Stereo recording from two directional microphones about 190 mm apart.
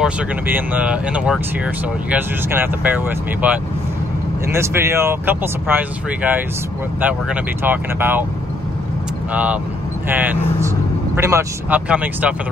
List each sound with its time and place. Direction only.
0.0 s speech: 10° right (ahead or behind)
9.3 s speech: 5° right (ahead or behind)